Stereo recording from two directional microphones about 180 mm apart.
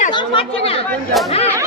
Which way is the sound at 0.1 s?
30° left (ahead or behind).